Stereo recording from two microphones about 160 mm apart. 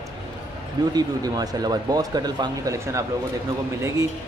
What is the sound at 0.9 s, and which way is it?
Speech, 25° right (ahead or behind).